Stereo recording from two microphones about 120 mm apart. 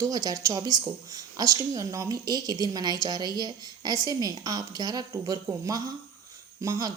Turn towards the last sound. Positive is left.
turn(degrees=-30)  # may be behind; listen again after turning